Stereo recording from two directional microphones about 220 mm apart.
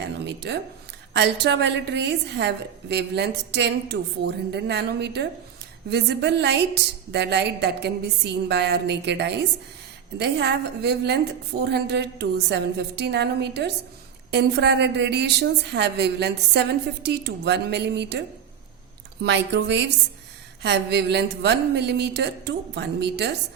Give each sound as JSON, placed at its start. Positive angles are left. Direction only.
{"t": 0.0, "sound": "a sound", "side_deg": -50}
{"t": 1.1, "sound": "a woman's voice", "side_deg": -50}
{"t": 19.2, "sound": "a woman's voice", "side_deg": -50}